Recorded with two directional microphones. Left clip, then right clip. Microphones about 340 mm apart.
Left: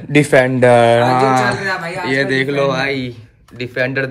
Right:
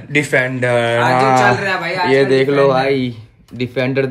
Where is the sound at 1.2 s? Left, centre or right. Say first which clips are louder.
Right 2 dB; centre.